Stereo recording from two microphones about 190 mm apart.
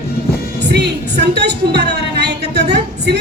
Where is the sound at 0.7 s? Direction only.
60° right (ahead or behind).